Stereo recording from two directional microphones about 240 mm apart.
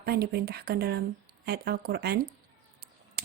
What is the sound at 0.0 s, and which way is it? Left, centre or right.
A woman's voice, right.